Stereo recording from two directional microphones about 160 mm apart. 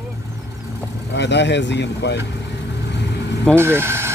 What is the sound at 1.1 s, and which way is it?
Speech, 90° left.